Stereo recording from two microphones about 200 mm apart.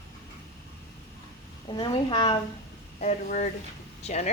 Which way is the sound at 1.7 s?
25° left (ahead or behind).